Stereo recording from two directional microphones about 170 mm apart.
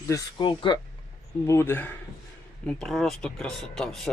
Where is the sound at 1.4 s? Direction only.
15° left (ahead or behind).